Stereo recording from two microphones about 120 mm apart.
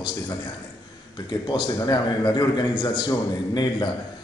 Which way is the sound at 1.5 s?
35° left (ahead or behind).